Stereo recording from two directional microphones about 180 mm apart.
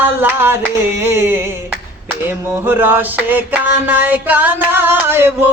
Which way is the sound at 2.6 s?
10° right (ahead or behind).